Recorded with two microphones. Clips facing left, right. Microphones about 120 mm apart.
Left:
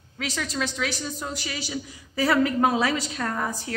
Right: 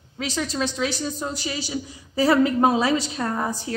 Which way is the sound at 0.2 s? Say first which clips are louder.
Right 3 dB; 25° right (ahead or behind).